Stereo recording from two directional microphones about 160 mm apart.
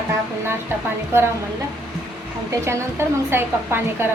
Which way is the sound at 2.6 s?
15° right (ahead or behind).